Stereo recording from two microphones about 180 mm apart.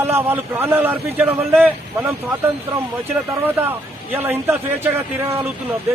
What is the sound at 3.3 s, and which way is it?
A man's voice, 10° right (ahead or behind).